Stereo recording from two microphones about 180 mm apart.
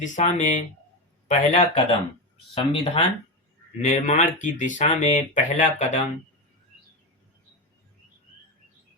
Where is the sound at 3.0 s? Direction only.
30° left (ahead or behind).